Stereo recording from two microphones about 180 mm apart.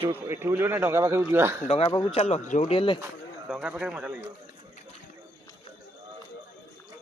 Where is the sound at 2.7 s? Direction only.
30° left (ahead or behind).